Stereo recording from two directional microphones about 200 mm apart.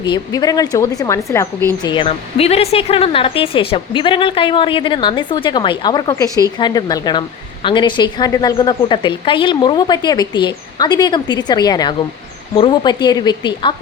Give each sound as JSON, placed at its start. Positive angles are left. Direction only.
{"t": 0.0, "sound": "a woman's voice", "side_deg": 20}